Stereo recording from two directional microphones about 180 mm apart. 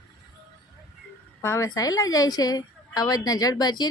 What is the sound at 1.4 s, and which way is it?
A woman's voice, 15° left (ahead or behind).